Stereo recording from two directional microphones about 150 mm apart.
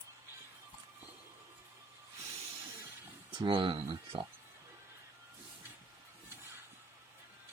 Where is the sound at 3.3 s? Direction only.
35° right (ahead or behind).